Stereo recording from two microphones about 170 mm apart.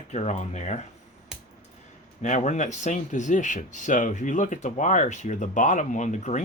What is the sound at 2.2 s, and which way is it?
Speech, 45° left (ahead or behind).